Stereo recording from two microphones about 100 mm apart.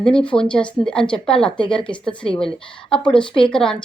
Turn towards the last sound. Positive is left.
turn(degrees=10)  # may be behind; listen again after turning